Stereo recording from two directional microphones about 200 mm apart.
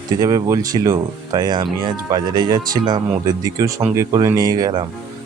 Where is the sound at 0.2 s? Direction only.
20° right (ahead or behind).